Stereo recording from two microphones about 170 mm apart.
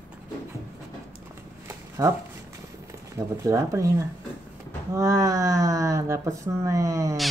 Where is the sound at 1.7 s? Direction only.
15° right (ahead or behind).